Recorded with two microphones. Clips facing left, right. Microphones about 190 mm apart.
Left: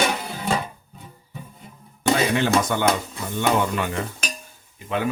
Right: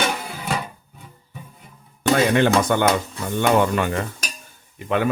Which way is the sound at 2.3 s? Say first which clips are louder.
Right 3 dB; 60° right (ahead or behind).